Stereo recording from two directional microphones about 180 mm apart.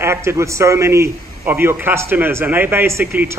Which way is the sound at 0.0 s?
15° right (ahead or behind).